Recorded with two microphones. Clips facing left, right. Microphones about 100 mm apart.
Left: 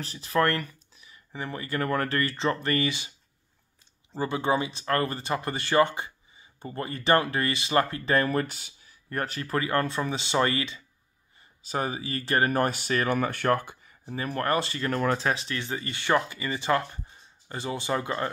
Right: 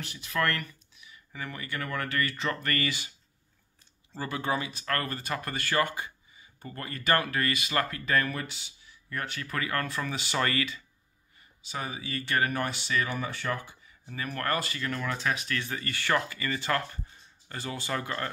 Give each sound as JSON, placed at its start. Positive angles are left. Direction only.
{"t": 0.0, "sound": "speech", "side_deg": 35}
{"t": 4.1, "sound": "speech", "side_deg": 25}
{"t": 11.6, "sound": "speech", "side_deg": 40}
{"t": 14.0, "sound": "speech", "side_deg": 30}
{"t": 14.9, "sound": "speech", "side_deg": 40}